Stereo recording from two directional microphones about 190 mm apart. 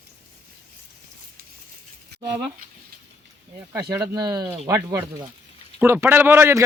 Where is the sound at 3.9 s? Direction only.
20° right (ahead or behind).